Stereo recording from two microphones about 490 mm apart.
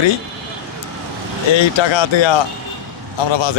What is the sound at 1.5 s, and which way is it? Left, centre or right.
Speech, left.